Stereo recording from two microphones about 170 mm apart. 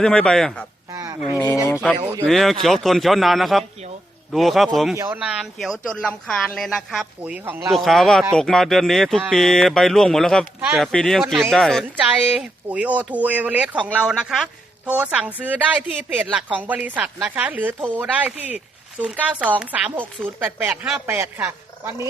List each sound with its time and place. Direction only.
0.0 s speech: 5° left (ahead or behind)
0.9 s a sound: 15° right (ahead or behind)
1.6 s speech: 10° left (ahead or behind)
4.9 s speech: 10° right (ahead or behind)
7.7 s speech: centre (ahead or behind); by 22.0 s 15° right (ahead or behind)